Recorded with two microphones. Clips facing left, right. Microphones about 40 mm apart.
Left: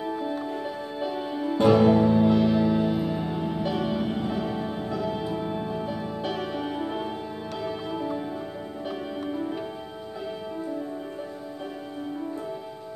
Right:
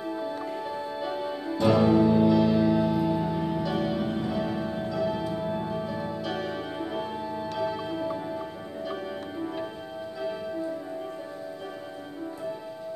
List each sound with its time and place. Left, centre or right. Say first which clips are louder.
1.1 s music: left 2 dB; left
1.6 s music: left 3 dB; left
2.0 s music: even; centre
2.2 s music: even; left
2.5 s music: even; centre; by 4.2 s left
4.5 s music: even; left
4.8 s music: right 3 dB; left
5.1 s music: left 1 dB; left
5.5 s music: even; centre
6.2 s music: left 2 dB; left
6.8 s music: left 1 dB; left
7.9 s music: left 1 dB; centre